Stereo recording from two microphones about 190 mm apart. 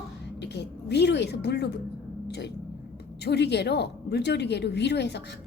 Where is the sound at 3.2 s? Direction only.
60° left (ahead or behind).